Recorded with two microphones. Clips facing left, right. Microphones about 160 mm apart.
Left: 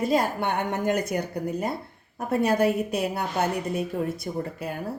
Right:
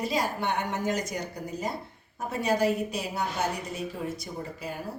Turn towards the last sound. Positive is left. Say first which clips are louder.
# left 5 dB
turn(degrees=60)  # may be behind; listen again after turning